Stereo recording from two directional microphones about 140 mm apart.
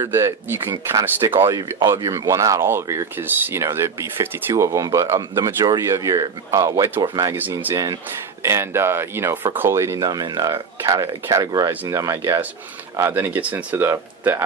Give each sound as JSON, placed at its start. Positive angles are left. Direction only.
{"t": 0.0, "sound": "speech", "side_deg": -20}
{"t": 8.4, "sound": "speech", "side_deg": -20}